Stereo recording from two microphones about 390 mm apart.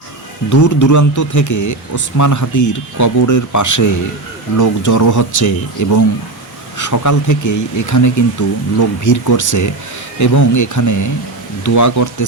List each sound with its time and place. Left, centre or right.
0.5 s speech: left